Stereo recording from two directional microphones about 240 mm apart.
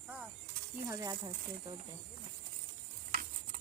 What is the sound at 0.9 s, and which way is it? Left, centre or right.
Speech, centre.